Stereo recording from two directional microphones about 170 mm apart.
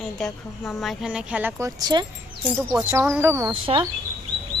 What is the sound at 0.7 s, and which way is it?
Speech, centre (ahead or behind).